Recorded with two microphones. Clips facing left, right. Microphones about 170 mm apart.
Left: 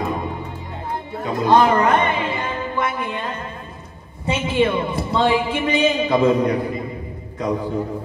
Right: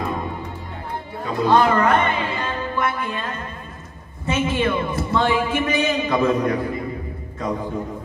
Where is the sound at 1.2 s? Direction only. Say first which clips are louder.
Left 1 dB; 20° left (ahead or behind).